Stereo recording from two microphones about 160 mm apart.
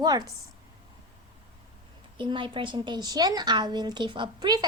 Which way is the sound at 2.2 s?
30° right (ahead or behind).